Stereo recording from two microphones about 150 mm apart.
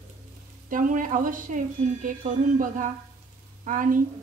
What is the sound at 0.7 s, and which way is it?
A woman's voice, 60° right (ahead or behind).